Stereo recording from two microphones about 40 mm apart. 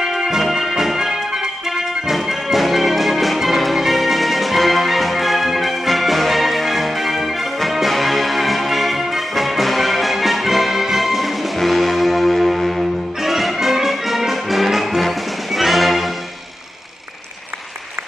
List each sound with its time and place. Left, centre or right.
0.0 s music: centre